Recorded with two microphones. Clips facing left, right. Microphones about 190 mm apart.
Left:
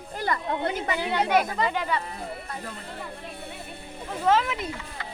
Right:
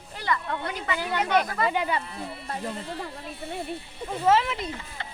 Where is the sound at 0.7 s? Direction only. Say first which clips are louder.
Left 2 dB; 40° left (ahead or behind).